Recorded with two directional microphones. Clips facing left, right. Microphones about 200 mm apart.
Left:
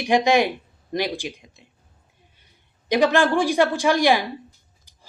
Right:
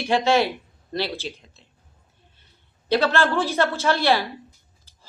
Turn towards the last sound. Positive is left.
turn(degrees=15)  # may be behind; listen again after turning